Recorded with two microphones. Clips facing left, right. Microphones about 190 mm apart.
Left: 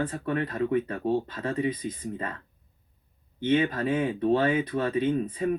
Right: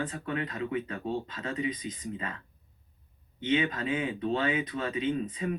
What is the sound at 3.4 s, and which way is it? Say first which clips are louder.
Speech: left 4 dB; 50° left (ahead or behind).